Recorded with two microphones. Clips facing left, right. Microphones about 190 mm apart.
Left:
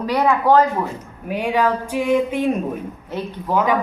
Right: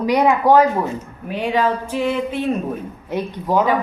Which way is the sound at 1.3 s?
10° left (ahead or behind).